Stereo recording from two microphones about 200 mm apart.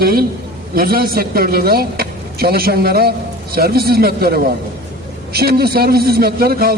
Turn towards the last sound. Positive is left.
turn(degrees=-50)  # may be behind; listen again after turning